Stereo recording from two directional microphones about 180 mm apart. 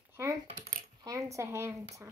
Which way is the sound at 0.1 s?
15° right (ahead or behind).